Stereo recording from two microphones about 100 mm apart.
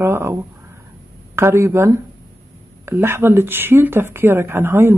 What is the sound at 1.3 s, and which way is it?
Speech, 25° right (ahead or behind).